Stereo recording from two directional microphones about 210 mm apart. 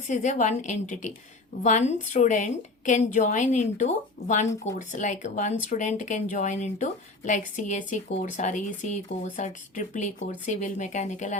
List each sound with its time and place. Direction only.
0.1 s speech: 35° left (ahead or behind)